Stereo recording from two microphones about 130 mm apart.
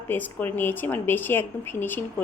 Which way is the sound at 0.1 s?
15° left (ahead or behind).